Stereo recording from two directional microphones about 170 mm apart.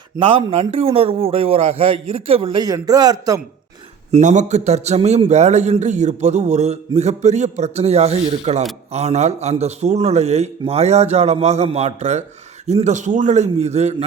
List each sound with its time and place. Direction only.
0.2 s a man's voice: 30° right (ahead or behind)
4.1 s a man's voice: 45° right (ahead or behind)